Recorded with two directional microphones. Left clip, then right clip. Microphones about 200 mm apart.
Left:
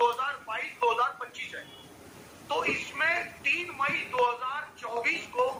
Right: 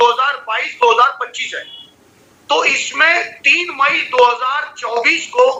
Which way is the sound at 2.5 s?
45° right (ahead or behind).